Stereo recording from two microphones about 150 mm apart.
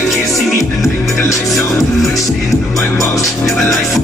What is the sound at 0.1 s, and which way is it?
Music, centre (ahead or behind).